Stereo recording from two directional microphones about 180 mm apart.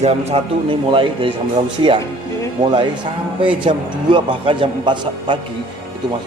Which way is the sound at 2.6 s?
40° right (ahead or behind).